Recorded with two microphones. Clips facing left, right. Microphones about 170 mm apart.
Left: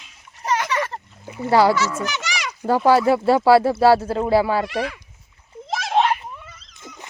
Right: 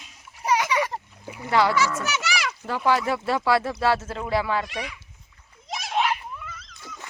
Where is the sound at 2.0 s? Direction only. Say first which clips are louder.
Even; 5° right (ahead or behind).